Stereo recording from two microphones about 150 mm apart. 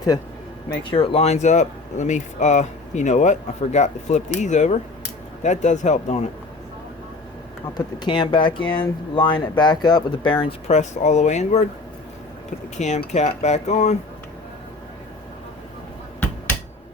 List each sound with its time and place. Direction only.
0.9 s speech: 35° left (ahead or behind); by 6.2 s 50° left (ahead or behind)
7.7 s speech: 30° left (ahead or behind)
10.7 s speech: 50° left (ahead or behind)
12.7 s speech: 50° left (ahead or behind)